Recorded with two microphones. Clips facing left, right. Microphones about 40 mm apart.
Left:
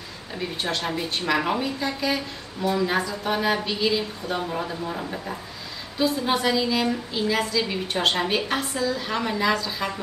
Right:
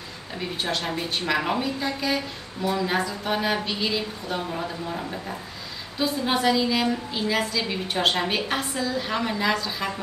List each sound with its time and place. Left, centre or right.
0.4 s a woman's voice: centre